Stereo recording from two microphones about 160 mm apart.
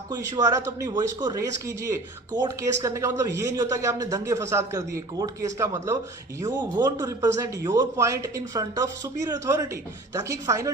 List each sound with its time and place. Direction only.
0.1 s speech: 20° right (ahead or behind)